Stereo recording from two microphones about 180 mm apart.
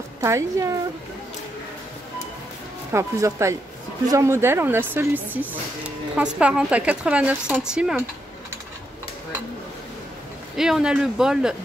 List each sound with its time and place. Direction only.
0.2 s speech: 15° right (ahead or behind)
2.9 s speech: 15° right (ahead or behind)
10.5 s speech: 5° right (ahead or behind)